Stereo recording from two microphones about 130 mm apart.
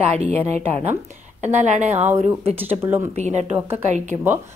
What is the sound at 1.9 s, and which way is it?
Speech, 15° right (ahead or behind).